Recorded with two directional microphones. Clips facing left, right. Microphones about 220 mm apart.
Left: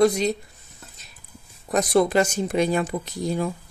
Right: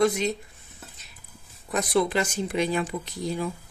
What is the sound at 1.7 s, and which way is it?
Speech, 40° left (ahead or behind).